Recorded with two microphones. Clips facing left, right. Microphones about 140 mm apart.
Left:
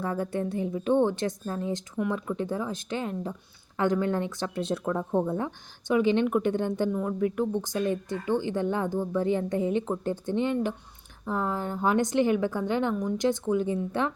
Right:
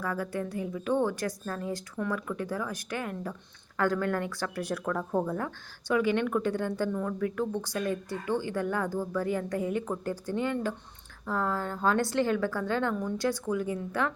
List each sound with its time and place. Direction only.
0.0 s speech: 25° left (ahead or behind)